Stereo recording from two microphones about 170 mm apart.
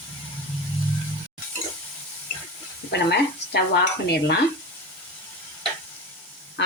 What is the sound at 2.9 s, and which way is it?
Cutlery, 75° left (ahead or behind).